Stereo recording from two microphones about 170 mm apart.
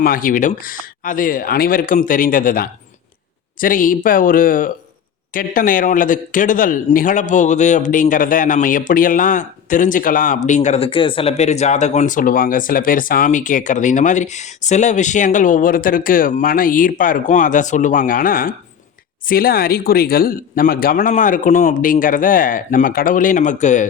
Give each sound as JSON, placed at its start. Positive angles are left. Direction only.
{"t": 0.0, "sound": "speech", "side_deg": 55}